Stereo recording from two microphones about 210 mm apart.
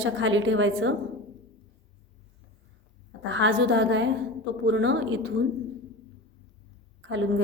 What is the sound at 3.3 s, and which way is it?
A woman's voice, 60° right (ahead or behind).